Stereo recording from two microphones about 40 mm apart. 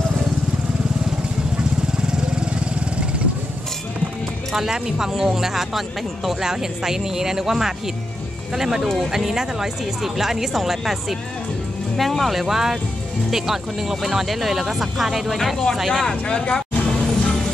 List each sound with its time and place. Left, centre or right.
2.0 s vehicle: centre
4.6 s speech: centre
16.1 s speech: left
16.5 s vehicle: centre